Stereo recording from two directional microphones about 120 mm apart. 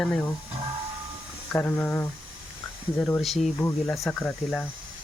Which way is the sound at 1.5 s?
20° left (ahead or behind).